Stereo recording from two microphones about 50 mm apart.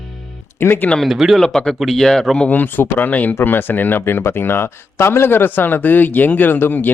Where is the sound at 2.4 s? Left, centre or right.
Left.